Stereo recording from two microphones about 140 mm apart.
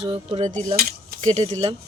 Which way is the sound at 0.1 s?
45° right (ahead or behind).